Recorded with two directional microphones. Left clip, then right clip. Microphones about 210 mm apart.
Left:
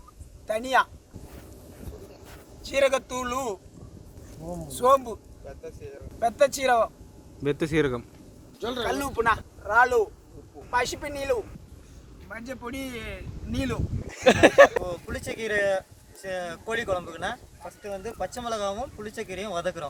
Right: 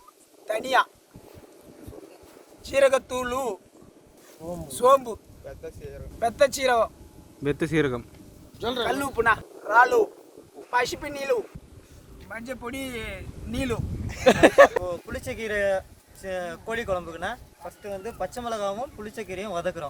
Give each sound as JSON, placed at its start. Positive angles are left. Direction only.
{"t": 0.4, "sound": "speech", "side_deg": 0}
{"t": 2.6, "sound": "speech", "side_deg": -10}
{"t": 4.7, "sound": "speech", "side_deg": -10}
{"t": 5.4, "sound": "speech", "side_deg": -40}
{"t": 6.1, "sound": "speech", "side_deg": -10}
{"t": 8.5, "sound": "speech", "side_deg": -45}
{"t": 8.8, "sound": "speech", "side_deg": -15}
{"t": 12.3, "sound": "speech", "side_deg": -40}
{"t": 14.3, "sound": "speech", "side_deg": 0}